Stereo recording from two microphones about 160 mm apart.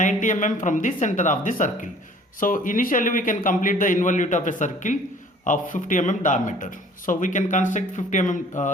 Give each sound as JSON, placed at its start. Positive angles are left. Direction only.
{"t": 0.0, "sound": "speech", "side_deg": 50}